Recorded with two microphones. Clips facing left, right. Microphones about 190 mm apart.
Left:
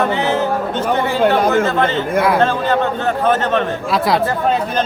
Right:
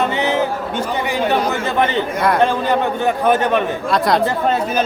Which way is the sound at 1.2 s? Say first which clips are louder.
Left 3 dB; 55° left (ahead or behind).